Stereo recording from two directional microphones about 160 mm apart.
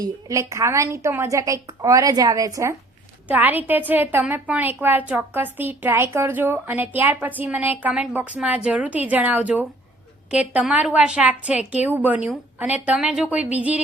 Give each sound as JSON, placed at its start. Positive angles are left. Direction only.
{"t": 0.0, "sound": "a woman's voice", "side_deg": -20}